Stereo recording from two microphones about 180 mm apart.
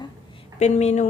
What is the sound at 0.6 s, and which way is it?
Speech, 40° left (ahead or behind).